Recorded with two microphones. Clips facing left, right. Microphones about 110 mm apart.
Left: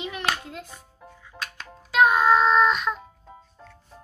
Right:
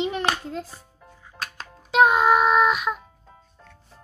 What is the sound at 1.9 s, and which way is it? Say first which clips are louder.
Child singing: right 1 dB; 20° right (ahead or behind).